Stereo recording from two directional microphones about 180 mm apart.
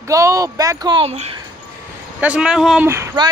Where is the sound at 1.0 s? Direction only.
35° right (ahead or behind).